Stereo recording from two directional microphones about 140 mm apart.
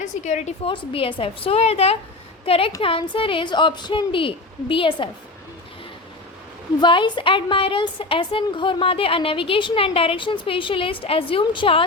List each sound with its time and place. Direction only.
0.0 s a woman's voice: 60° left (ahead or behind)
0.6 s a woman's voice: 40° left (ahead or behind)
6.7 s a woman's voice: 35° left (ahead or behind)